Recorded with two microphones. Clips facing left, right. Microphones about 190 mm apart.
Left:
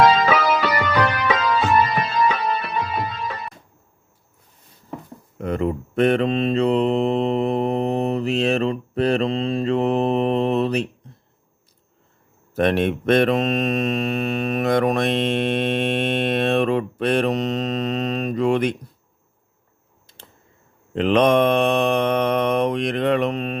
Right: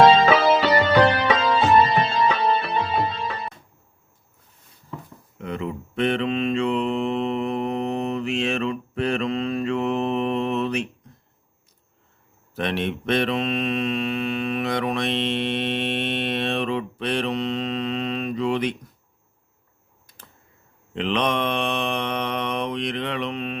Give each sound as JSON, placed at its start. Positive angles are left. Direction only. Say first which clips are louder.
{"t": 0.0, "sound": "music", "louder": "right 2 dB", "side_deg": -25}
{"t": 5.4, "sound": "mantra", "louder": "left 6 dB", "side_deg": 45}
{"t": 12.5, "sound": "mantra", "louder": "left 7 dB", "side_deg": 45}
{"t": 20.1, "sound": "a sound", "louder": "left 3 dB", "side_deg": 25}
{"t": 20.9, "sound": "mantra", "louder": "left 7 dB", "side_deg": 45}